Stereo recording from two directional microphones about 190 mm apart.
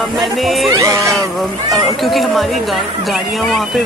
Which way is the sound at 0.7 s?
15° right (ahead or behind).